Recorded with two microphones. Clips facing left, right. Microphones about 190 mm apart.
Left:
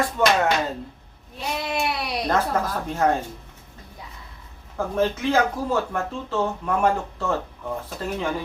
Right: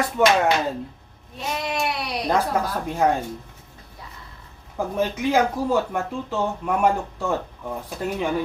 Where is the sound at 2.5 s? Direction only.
10° right (ahead or behind).